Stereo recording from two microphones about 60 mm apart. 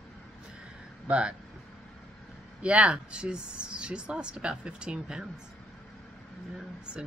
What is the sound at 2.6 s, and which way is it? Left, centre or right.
Speech, centre.